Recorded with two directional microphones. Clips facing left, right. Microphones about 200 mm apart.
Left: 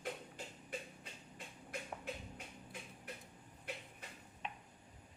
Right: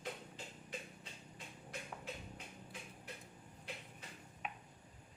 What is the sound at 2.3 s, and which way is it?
Music, 55° left (ahead or behind).